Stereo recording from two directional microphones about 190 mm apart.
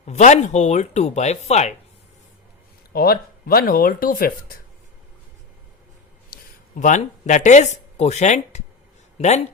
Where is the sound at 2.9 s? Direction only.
50° left (ahead or behind).